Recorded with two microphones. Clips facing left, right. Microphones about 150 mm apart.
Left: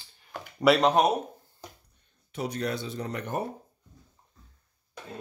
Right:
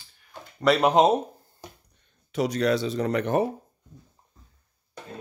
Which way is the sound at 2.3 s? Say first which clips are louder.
Right 8 dB; 90° right.